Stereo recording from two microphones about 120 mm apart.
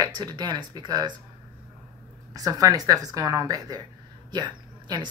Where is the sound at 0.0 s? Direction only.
40° right (ahead or behind).